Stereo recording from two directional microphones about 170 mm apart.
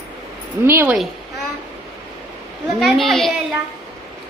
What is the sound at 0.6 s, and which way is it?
Speech, 15° right (ahead or behind).